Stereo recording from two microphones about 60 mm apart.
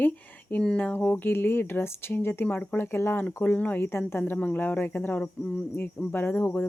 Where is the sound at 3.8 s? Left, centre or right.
Left.